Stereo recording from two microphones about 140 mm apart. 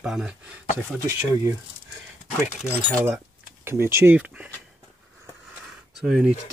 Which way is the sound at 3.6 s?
15° right (ahead or behind).